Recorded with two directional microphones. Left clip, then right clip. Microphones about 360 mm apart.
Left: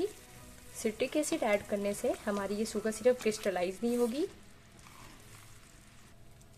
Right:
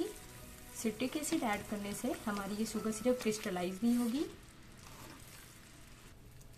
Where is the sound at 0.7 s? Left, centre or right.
Left.